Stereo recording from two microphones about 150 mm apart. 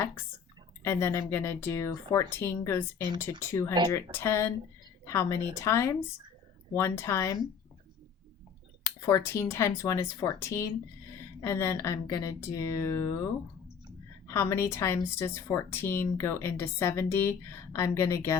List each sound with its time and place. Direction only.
0.9 s speech: 15° left (ahead or behind)
8.8 s speech: 20° left (ahead or behind)
14.3 s speech: 20° left (ahead or behind)